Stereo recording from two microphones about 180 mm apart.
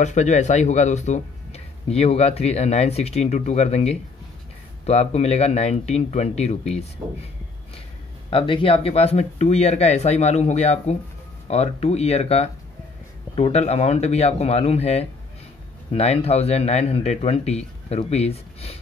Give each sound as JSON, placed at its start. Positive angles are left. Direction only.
{"t": 0.0, "sound": "speech", "side_deg": 40}
{"t": 8.3, "sound": "speech", "side_deg": 30}